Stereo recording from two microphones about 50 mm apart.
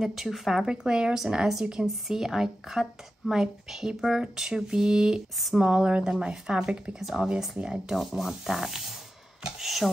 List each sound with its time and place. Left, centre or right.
0.0 s speech: centre
0.8 s speech: centre